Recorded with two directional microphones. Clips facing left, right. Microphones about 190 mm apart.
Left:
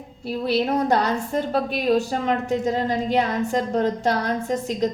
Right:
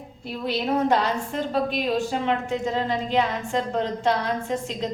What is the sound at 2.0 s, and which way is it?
A woman's voice, 40° left (ahead or behind).